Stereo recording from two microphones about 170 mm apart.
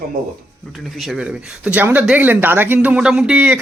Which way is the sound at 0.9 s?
Centre (ahead or behind).